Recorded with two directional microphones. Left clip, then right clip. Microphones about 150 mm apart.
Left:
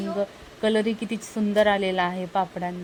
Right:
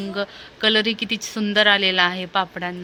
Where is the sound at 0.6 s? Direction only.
15° left (ahead or behind).